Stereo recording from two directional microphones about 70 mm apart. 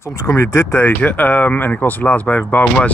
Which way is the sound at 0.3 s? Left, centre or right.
Left.